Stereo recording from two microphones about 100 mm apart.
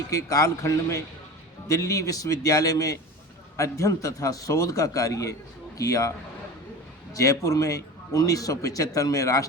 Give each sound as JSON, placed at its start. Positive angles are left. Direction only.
{"t": 0.1, "sound": "a man's voice", "side_deg": 35}